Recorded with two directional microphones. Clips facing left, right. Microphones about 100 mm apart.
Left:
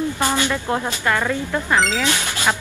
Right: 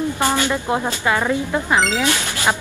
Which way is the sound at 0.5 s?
15° right (ahead or behind).